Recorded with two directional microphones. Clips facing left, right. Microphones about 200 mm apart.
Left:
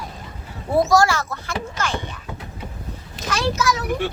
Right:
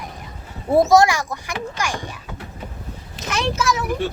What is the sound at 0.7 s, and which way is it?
Speech, 20° right (ahead or behind).